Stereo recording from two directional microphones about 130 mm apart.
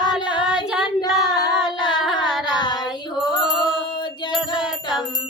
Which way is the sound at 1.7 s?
35° left (ahead or behind).